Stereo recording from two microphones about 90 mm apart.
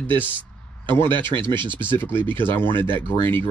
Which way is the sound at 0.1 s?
20° left (ahead or behind).